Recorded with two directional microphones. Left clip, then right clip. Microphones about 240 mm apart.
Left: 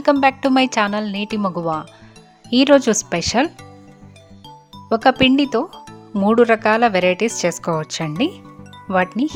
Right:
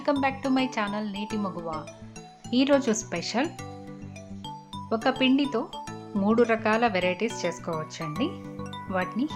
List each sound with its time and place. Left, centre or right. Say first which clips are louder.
0.0 s speech: left 11 dB; left
4.9 s speech: left 10 dB; left
5.7 s music: even; centre
6.1 s speech: left 9 dB; left